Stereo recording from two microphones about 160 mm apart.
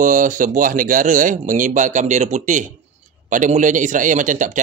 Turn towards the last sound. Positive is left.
turn(degrees=-55)  # may be behind; listen again after turning